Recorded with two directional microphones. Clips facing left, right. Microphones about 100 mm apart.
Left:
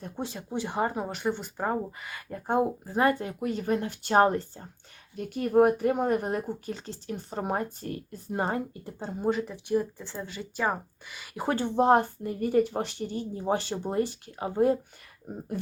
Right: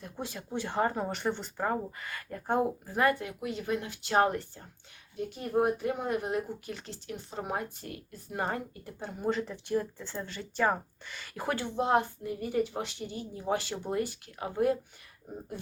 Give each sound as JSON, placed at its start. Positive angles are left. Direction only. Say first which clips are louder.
{"t": 0.2, "sound": "speech", "louder": "left 3 dB", "side_deg": 25}
{"t": 5.1, "sound": "speech", "louder": "left 7 dB", "side_deg": 65}
{"t": 9.3, "sound": "speech", "louder": "left 3 dB", "side_deg": 15}
{"t": 11.4, "sound": "a woman's voice", "louder": "left 7 dB", "side_deg": 40}